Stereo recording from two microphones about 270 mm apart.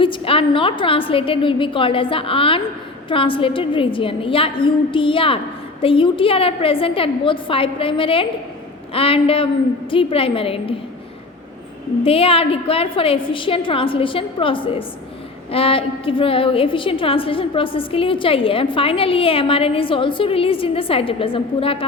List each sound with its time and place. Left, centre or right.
0.0 s a woman's voice: centre
12.0 s a woman's voice: left